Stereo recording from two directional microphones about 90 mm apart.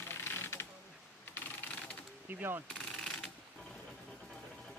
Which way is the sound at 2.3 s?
25° right (ahead or behind).